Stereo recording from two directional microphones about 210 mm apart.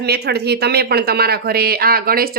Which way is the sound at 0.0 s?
50° right (ahead or behind).